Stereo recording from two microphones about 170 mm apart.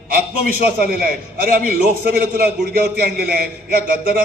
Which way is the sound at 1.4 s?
55° right (ahead or behind).